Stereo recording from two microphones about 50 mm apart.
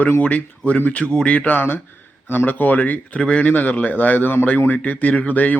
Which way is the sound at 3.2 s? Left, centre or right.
Left.